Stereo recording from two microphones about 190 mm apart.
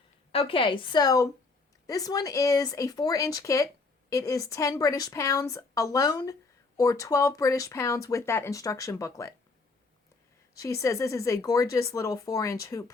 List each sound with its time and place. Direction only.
0.3 s a woman's voice: 30° left (ahead or behind)
10.6 s speech: 15° left (ahead or behind)